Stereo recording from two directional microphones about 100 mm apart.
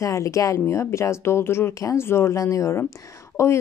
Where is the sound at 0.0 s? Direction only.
30° left (ahead or behind).